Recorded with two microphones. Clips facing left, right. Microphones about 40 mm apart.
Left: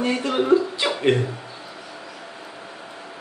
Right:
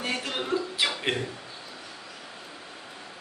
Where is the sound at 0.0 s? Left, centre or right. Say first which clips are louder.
Left 8 dB; centre.